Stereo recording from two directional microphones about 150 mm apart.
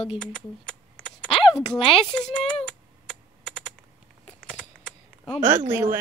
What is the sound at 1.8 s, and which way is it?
Speech, 40° left (ahead or behind).